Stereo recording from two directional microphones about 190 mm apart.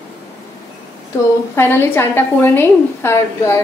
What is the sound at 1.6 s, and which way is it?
A woman's voice, 10° left (ahead or behind).